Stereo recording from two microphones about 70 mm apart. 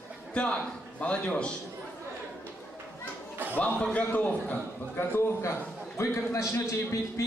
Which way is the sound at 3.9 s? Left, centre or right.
Left.